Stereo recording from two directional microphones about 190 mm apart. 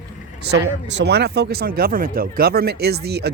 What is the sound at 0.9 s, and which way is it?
Speech, 65° right (ahead or behind).